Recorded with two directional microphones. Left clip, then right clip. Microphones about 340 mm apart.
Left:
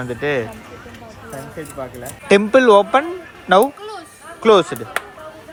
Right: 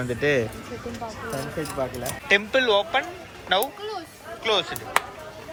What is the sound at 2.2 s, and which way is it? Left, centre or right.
Speech, centre.